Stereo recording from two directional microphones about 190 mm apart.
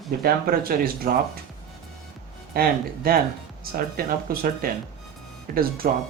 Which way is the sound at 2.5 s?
55° right (ahead or behind).